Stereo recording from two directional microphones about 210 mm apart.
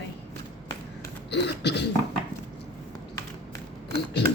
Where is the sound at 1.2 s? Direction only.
55° left (ahead or behind).